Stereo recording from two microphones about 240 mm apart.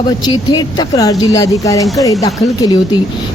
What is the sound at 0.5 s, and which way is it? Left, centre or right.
A woman's voice, centre.